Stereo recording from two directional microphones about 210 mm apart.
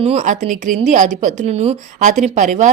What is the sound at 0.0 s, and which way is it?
A woman's voice, 35° right (ahead or behind).